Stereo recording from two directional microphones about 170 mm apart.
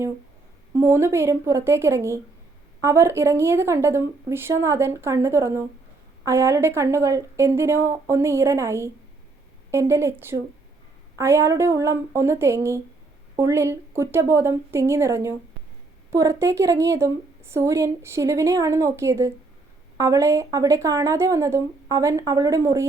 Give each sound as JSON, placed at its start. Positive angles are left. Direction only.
{"t": 0.7, "sound": "a woman's voice", "side_deg": -15}